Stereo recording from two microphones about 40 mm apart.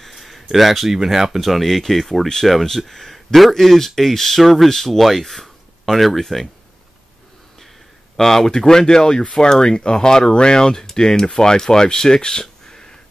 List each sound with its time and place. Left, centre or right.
0.0 s speech: centre
8.2 s speech: centre